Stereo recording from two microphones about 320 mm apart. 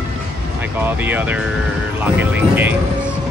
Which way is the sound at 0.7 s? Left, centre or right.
Centre.